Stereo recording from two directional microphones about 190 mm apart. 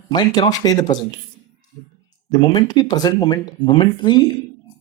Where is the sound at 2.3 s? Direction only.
20° left (ahead or behind).